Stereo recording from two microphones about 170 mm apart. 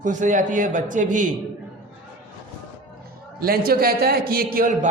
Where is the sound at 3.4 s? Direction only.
60° right (ahead or behind).